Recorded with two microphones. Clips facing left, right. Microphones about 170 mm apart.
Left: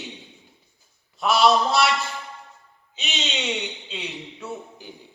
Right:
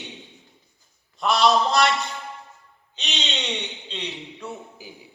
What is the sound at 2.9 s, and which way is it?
Speech, 5° left (ahead or behind).